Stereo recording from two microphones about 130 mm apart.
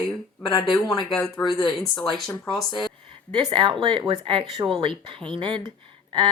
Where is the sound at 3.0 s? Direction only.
40° right (ahead or behind).